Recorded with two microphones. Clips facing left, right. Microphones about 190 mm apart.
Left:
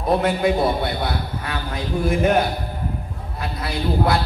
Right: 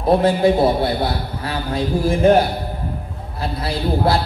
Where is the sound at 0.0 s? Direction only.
30° right (ahead or behind).